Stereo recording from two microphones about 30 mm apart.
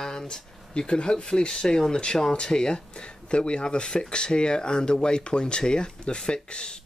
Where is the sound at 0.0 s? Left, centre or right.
Left.